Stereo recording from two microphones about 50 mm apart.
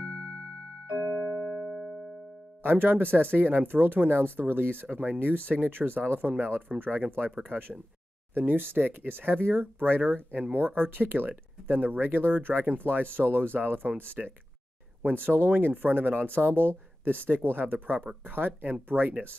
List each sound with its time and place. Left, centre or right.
0.9 s music: right
2.6 s speech: right
15.2 s speech: right